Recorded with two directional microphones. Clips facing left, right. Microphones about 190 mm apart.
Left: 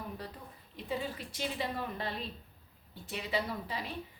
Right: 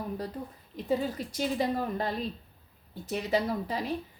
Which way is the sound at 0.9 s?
40° right (ahead or behind).